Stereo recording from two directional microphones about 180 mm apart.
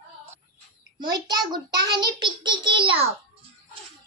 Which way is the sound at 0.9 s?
25° right (ahead or behind).